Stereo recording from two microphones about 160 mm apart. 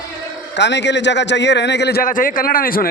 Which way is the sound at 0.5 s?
90° left.